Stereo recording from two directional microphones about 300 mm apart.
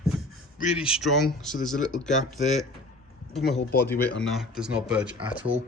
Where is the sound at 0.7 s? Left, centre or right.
Centre.